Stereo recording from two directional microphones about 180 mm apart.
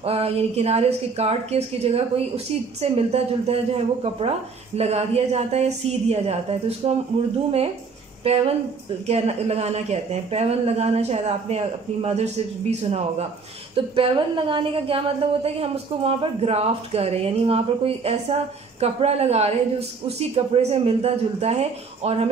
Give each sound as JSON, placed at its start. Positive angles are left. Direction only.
{"t": 0.0, "sound": "a woman's voice", "side_deg": -35}